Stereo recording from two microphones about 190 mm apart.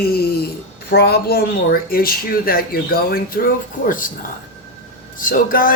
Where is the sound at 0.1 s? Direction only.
55° left (ahead or behind).